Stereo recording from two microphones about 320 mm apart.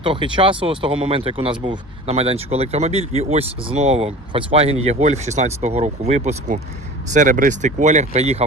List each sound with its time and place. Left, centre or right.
0.0 s speech: centre